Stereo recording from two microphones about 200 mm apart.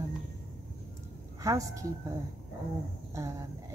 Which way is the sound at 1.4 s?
15° right (ahead or behind).